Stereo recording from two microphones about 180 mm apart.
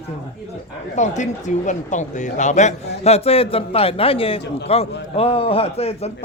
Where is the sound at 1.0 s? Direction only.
40° left (ahead or behind).